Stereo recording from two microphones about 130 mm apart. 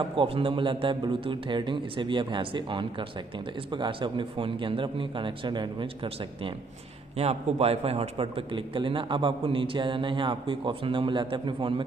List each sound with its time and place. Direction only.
0.1 s a man's voice: 40° right (ahead or behind)